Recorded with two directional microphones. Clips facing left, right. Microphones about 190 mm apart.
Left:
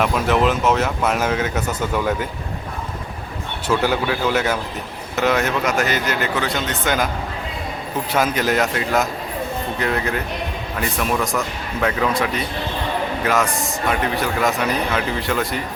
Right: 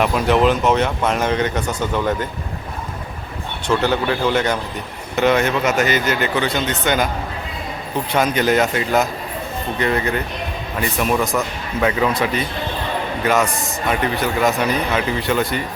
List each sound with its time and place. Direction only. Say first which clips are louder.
0.0 s speech: right 2 dB; centre (ahead or behind)
3.7 s speech: right 1 dB; 10° left (ahead or behind)
8.1 s speech: right 2 dB; centre (ahead or behind)